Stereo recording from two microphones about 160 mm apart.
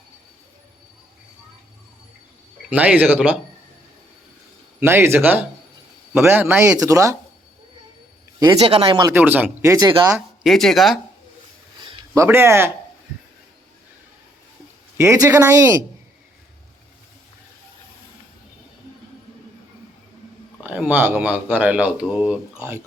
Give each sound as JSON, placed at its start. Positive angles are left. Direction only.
{"t": 2.6, "sound": "speech", "side_deg": -10}
{"t": 4.8, "sound": "speech", "side_deg": -15}
{"t": 6.7, "sound": "speech", "side_deg": -20}
{"t": 8.4, "sound": "speech", "side_deg": -25}
{"t": 8.7, "sound": "speech", "side_deg": -35}
{"t": 9.0, "sound": "speech", "side_deg": -15}
{"t": 10.4, "sound": "speech", "side_deg": 0}
{"t": 12.1, "sound": "speech", "side_deg": -15}
{"t": 14.9, "sound": "speech", "side_deg": -20}
{"t": 20.7, "sound": "speech", "side_deg": -10}